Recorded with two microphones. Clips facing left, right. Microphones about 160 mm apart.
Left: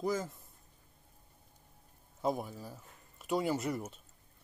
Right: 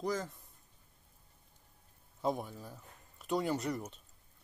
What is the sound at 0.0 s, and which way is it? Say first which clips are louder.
Speech: left 2 dB; 5° left (ahead or behind).